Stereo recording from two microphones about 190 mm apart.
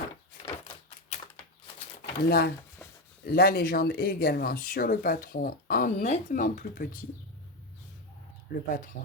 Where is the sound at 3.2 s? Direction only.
55° left (ahead or behind).